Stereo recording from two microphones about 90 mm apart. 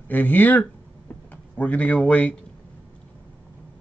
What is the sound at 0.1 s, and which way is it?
Speech, 20° left (ahead or behind).